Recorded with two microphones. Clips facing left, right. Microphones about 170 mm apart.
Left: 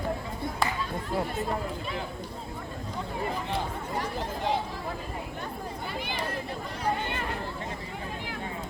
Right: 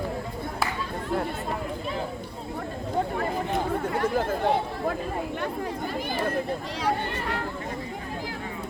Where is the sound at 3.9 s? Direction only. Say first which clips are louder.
Right 6 dB; 60° right (ahead or behind).